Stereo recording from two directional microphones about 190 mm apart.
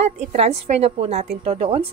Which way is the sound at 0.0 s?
35° right (ahead or behind).